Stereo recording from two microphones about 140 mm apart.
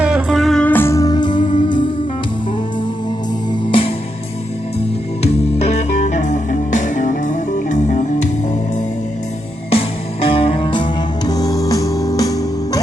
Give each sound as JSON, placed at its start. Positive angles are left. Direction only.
{"t": 0.0, "sound": "music", "side_deg": -5}
{"t": 0.6, "sound": "music", "side_deg": 15}
{"t": 3.7, "sound": "music", "side_deg": 40}
{"t": 5.2, "sound": "music", "side_deg": 50}
{"t": 9.6, "sound": "music", "side_deg": 45}
{"t": 11.3, "sound": "music", "side_deg": 25}